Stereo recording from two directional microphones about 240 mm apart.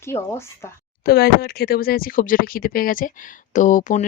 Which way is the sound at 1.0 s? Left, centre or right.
Left.